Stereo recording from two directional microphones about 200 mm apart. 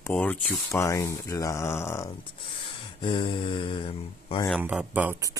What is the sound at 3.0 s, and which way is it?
Mantra, 25° left (ahead or behind).